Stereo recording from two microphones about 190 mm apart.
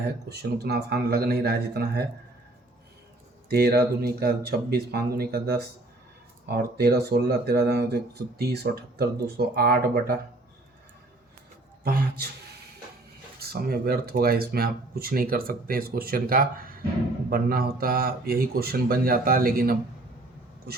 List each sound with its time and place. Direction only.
0.3 s speech: 60° right (ahead or behind)
3.5 s speech: 55° right (ahead or behind)
11.8 s speech: 55° right (ahead or behind)
13.4 s speech: 55° right (ahead or behind)